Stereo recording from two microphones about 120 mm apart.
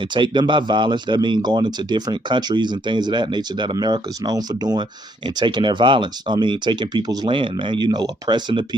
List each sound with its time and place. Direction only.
0.1 s speech: 40° right (ahead or behind)